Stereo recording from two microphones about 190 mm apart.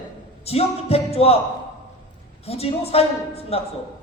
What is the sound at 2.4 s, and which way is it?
A man's voice, 30° left (ahead or behind).